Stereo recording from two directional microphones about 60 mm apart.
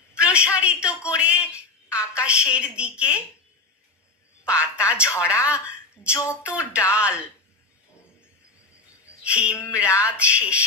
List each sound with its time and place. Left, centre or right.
0.1 s speech: centre
4.6 s speech: right
6.4 s speech: right
9.2 s speech: centre
9.5 s music: left
10.1 s speech: centre